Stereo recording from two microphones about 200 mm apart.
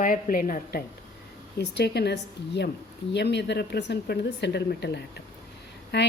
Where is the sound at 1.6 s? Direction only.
55° left (ahead or behind).